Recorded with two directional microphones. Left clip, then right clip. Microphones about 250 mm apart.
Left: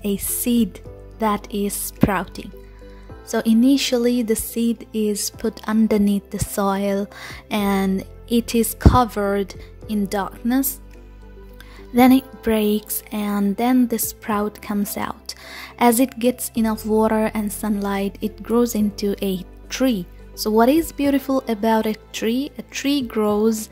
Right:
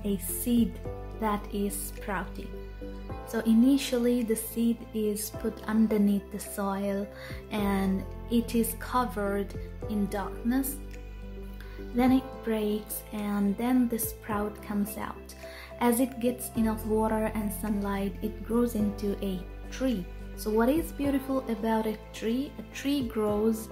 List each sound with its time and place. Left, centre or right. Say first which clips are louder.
0.0 s speech: left 9 dB; left
11.9 s speech: left 11 dB; left